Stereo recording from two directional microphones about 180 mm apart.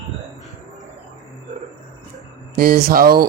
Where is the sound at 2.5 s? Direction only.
55° right (ahead or behind).